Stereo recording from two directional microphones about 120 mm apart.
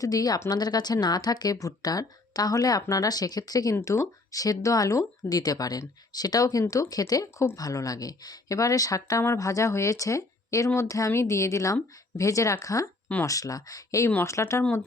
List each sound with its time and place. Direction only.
0.0 s speech: 30° left (ahead or behind)
14.6 s speech: 10° left (ahead or behind)